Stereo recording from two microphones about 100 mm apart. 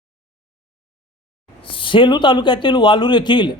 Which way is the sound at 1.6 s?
60° left (ahead or behind).